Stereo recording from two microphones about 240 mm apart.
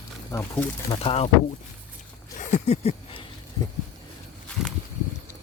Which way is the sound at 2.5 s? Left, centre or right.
Left.